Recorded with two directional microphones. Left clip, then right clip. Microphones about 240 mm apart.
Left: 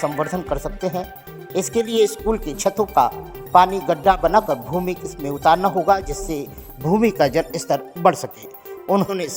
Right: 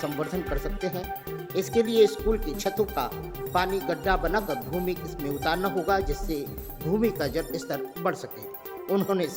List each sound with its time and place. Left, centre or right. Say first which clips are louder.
0.0 s speech: left 8 dB; centre
7.0 s speech: left 11 dB; left